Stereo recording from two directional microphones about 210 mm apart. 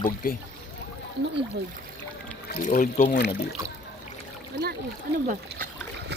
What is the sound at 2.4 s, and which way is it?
Speech, 40° left (ahead or behind).